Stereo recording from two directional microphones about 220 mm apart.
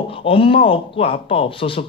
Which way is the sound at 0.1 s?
25° left (ahead or behind).